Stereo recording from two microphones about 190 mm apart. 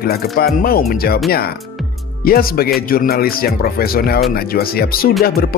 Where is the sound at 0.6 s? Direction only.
50° left (ahead or behind).